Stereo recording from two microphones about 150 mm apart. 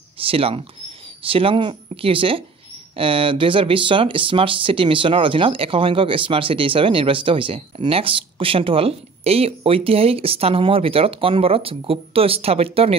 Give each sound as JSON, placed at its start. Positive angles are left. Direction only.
{"t": 0.2, "sound": "speech", "side_deg": -40}